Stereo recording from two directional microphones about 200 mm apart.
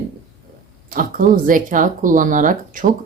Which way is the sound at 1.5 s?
40° right (ahead or behind).